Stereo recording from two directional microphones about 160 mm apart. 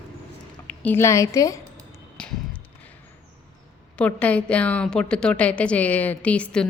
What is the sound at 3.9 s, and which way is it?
A woman's voice, 10° left (ahead or behind).